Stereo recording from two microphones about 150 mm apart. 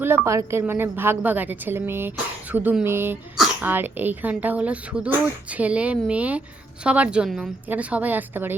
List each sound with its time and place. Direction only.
0.3 s a woman's voice: 20° right (ahead or behind)